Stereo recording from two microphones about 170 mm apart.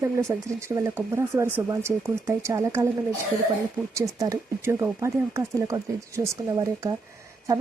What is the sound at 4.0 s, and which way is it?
Speech, 20° right (ahead or behind).